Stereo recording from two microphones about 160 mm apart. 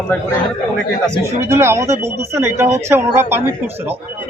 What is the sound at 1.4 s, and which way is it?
Speech, 15° right (ahead or behind).